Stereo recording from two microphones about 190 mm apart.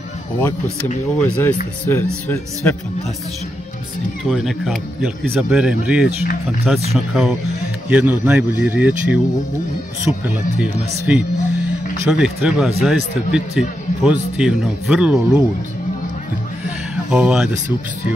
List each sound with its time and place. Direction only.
1.2 s speech: 10° left (ahead or behind)
4.2 s speech: centre (ahead or behind)
16.9 s speech: 5° right (ahead or behind)